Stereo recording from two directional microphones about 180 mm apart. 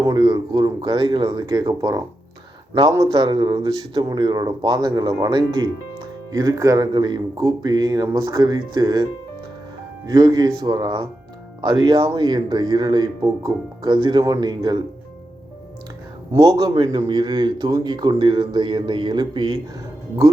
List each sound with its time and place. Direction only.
0.0 s a man's voice: 25° right (ahead or behind)
10.1 s a man's voice: 20° right (ahead or behind)
16.3 s a man's voice: 20° right (ahead or behind)